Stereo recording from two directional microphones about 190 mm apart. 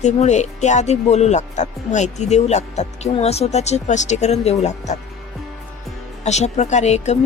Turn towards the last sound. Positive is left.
turn(degrees=35)  # may be behind; listen again after turning